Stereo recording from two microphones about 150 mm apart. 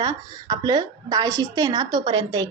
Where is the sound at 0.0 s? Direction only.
25° right (ahead or behind).